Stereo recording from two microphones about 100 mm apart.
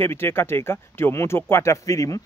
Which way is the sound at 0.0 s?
25° left (ahead or behind).